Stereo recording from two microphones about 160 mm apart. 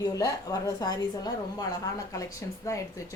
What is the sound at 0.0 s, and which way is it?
A woman's voice, 25° left (ahead or behind).